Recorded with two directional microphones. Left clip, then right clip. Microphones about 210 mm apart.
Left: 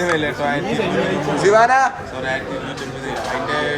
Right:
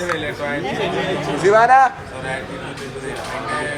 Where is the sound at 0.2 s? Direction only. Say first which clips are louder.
Left 3 dB; 25° left (ahead or behind).